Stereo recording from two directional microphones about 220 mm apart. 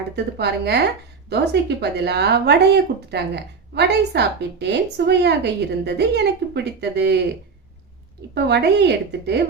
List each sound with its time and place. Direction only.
0.3 s speech: 50° right (ahead or behind)
8.4 s speech: 50° right (ahead or behind)